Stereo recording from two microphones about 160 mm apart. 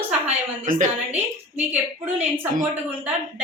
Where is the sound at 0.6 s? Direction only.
50° right (ahead or behind).